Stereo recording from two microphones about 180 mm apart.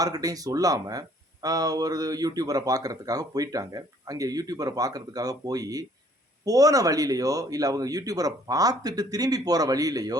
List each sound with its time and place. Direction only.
0.0 s speech: 20° right (ahead or behind)